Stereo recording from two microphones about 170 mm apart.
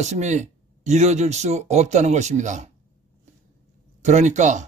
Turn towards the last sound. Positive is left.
turn(degrees=-45)  # may be behind; listen again after turning